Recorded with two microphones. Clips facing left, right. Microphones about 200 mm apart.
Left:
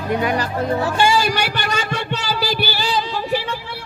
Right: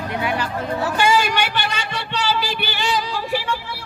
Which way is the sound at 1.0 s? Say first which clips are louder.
Right 1 dB; 30° left (ahead or behind).